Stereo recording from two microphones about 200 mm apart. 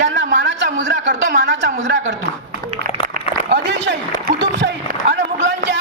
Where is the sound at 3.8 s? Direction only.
60° right (ahead or behind).